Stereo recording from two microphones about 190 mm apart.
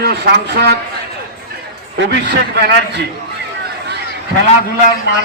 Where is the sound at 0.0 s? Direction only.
60° right (ahead or behind).